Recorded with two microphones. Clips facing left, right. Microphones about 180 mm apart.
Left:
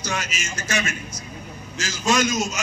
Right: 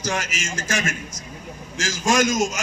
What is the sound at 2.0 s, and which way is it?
Speech, 45° right (ahead or behind).